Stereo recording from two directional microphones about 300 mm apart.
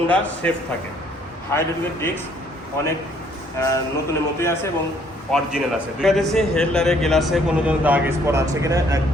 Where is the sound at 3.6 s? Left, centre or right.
Centre.